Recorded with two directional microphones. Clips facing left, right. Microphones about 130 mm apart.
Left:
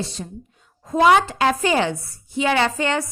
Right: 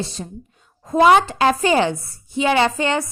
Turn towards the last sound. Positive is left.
turn(degrees=-20)  # may be behind; listen again after turning